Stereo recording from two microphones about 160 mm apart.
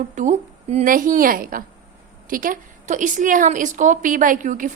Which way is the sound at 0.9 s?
60° right (ahead or behind).